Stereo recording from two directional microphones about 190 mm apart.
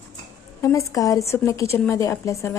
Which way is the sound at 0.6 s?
15° left (ahead or behind).